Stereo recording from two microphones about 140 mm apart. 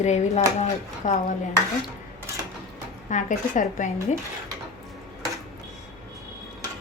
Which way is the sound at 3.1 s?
65° left (ahead or behind).